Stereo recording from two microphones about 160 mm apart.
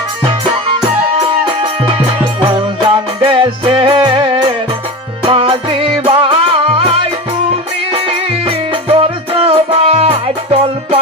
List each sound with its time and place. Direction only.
0.7 s music: 35° right (ahead or behind)
8.1 s music: 35° right (ahead or behind)